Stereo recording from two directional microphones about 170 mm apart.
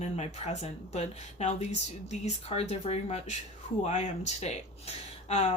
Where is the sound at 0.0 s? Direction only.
40° left (ahead or behind).